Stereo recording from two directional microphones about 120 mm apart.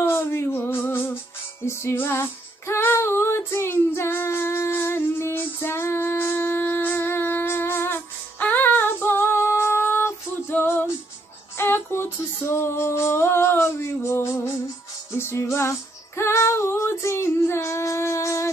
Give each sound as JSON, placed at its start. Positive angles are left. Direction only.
{"t": 0.0, "sound": "music", "side_deg": 20}
{"t": 1.7, "sound": "female singing", "side_deg": 20}
{"t": 15.1, "sound": "music", "side_deg": 20}
{"t": 16.2, "sound": "female singing", "side_deg": 20}